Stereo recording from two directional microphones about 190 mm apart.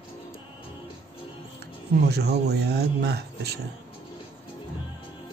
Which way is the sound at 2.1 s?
60° right (ahead or behind).